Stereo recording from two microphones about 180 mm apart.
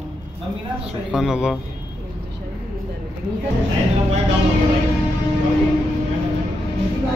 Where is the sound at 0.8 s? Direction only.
5° right (ahead or behind).